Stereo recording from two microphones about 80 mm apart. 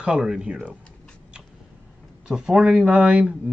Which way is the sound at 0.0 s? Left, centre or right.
Centre.